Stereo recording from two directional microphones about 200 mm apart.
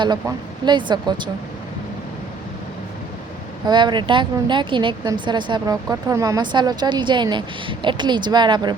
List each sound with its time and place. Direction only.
0.0 s speech: 20° right (ahead or behind)
3.7 s speech: 20° right (ahead or behind)